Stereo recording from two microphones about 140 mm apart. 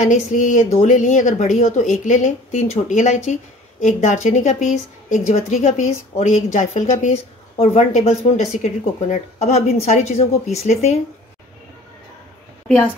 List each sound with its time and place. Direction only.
0.0 s a woman's voice: 60° left (ahead or behind)
12.6 s a woman's voice: 10° left (ahead or behind)